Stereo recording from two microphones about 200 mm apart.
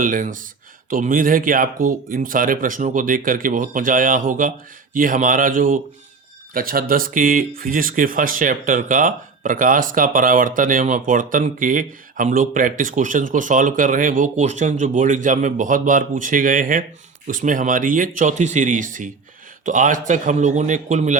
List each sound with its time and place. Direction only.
0.0 s speech: 40° right (ahead or behind)